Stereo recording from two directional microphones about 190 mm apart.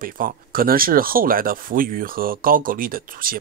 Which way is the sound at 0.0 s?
50° right (ahead or behind).